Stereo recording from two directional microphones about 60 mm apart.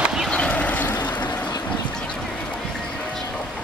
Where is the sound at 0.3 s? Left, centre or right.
Left.